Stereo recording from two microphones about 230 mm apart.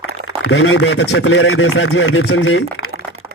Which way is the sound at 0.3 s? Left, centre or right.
Left.